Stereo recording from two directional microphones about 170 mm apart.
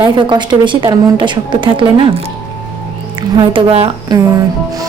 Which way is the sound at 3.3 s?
30° right (ahead or behind).